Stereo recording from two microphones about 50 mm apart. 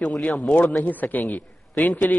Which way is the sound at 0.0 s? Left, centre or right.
Centre.